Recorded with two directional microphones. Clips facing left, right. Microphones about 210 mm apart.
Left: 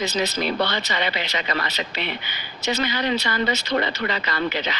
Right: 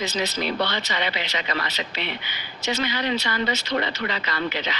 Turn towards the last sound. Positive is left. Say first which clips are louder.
# left 2 dB
turn(degrees=45)  # may be behind; listen again after turning